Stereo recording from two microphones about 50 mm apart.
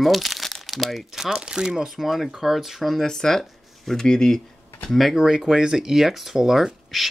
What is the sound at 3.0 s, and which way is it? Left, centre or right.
Speech, centre.